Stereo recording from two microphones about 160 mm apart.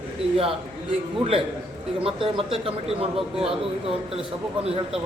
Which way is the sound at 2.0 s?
35° right (ahead or behind).